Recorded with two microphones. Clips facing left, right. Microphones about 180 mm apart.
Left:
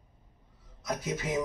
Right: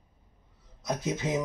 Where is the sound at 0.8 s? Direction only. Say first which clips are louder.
Right 3 dB; 20° right (ahead or behind).